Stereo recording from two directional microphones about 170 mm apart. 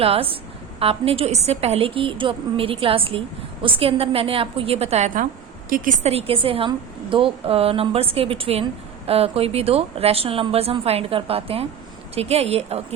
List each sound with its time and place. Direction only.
0.0 s a woman's voice: 35° right (ahead or behind)